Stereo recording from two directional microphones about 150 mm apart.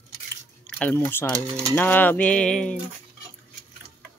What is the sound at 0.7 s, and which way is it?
Speech, 10° left (ahead or behind).